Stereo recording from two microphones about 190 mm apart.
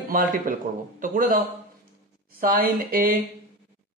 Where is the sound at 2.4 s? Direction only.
50° right (ahead or behind).